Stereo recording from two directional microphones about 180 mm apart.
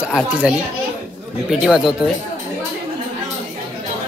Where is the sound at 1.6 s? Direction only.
5° right (ahead or behind).